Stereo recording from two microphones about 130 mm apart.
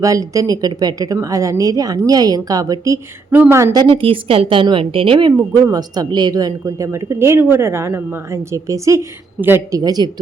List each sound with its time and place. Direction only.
0.0 s a woman's voice: 25° right (ahead or behind)
3.2 s a woman's voice: 15° right (ahead or behind)
3.8 s a woman's voice: 45° right (ahead or behind)